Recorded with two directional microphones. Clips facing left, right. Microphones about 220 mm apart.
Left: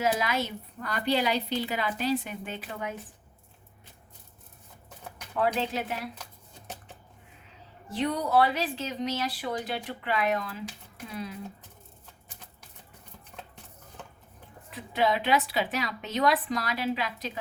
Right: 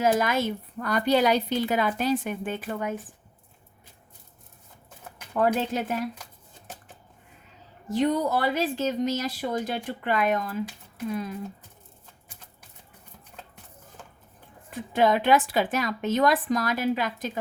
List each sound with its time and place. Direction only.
0.0 s a woman's voice: 45° right (ahead or behind)
5.4 s a woman's voice: 45° right (ahead or behind)
7.9 s a woman's voice: 45° right (ahead or behind)
14.7 s a woman's voice: 45° right (ahead or behind)